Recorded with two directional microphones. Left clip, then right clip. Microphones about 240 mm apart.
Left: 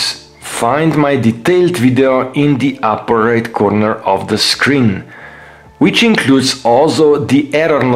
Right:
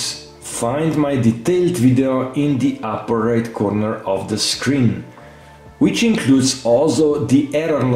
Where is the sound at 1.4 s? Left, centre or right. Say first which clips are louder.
Left 5 dB; left.